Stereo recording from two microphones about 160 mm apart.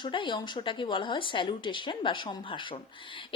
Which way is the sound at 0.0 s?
30° left (ahead or behind).